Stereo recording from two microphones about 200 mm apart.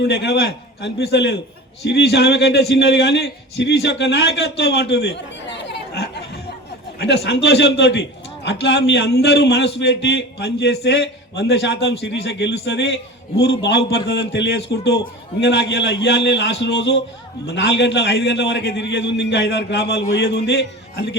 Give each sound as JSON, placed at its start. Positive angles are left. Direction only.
{"t": 0.0, "sound": "a man's voice", "side_deg": 55}